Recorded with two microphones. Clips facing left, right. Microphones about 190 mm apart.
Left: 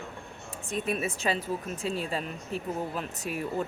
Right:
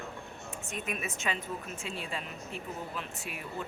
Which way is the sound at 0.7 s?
35° left (ahead or behind).